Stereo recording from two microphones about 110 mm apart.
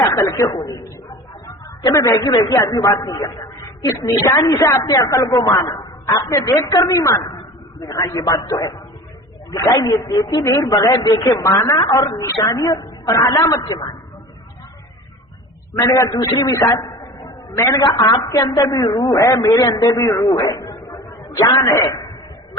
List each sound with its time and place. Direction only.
0.0 s a woman's voice: 35° left (ahead or behind)
15.9 s a man's voice: 35° left (ahead or behind)